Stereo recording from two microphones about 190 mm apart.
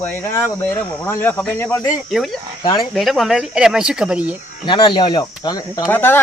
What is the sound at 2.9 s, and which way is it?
Speech, centre (ahead or behind).